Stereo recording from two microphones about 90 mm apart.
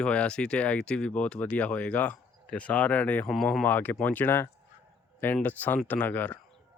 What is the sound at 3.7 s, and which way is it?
Speech, 20° left (ahead or behind).